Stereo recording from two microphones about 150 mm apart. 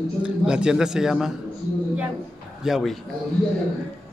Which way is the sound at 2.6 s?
Centre (ahead or behind).